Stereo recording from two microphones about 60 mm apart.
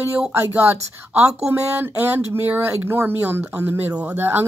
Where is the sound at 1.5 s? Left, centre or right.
Right.